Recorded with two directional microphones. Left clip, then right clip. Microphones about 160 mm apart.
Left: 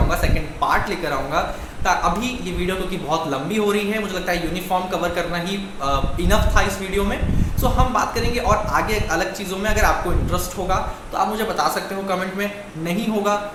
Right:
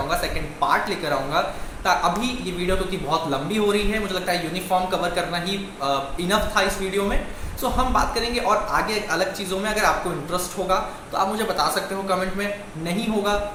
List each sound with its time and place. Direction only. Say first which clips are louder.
0.7 s a man's voice: left 1 dB; 5° left (ahead or behind)